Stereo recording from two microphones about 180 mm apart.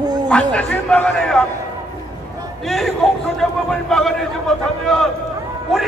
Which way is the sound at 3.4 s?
Centre (ahead or behind).